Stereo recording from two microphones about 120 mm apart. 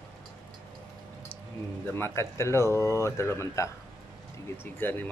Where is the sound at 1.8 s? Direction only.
20° left (ahead or behind).